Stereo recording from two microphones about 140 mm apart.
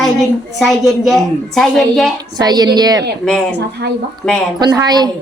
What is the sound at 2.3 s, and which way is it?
Speech, 30° right (ahead or behind).